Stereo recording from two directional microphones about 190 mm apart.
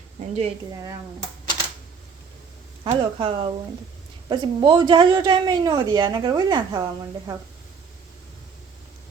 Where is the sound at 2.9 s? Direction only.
25° right (ahead or behind).